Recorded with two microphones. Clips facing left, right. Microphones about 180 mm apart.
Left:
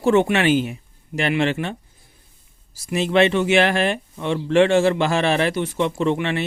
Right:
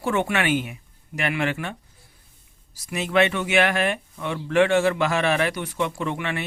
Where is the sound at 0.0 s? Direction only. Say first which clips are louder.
Left 7 dB; 25° left (ahead or behind).